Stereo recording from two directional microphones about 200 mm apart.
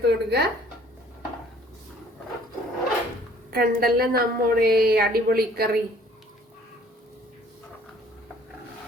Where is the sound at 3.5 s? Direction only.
50° right (ahead or behind).